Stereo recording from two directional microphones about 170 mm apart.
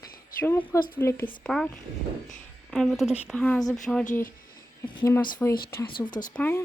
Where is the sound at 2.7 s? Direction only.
Centre (ahead or behind).